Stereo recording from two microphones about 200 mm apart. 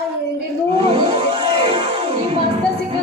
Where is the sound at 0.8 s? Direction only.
30° right (ahead or behind).